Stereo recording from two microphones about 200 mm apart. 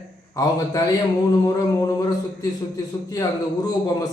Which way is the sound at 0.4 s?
15° left (ahead or behind).